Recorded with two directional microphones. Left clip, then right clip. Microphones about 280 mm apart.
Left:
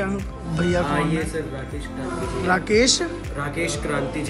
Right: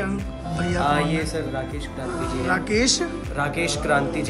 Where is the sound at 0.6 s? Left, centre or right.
Centre.